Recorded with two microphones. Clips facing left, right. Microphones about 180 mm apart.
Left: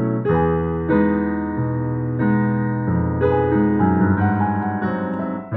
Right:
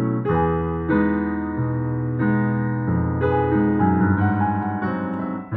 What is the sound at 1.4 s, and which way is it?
Music, 40° left (ahead or behind).